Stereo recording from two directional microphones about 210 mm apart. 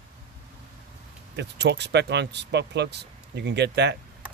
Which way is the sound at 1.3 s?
55° right (ahead or behind).